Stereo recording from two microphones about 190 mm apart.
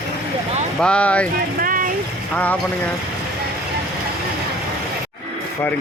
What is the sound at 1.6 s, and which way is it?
Vehicle, 45° right (ahead or behind).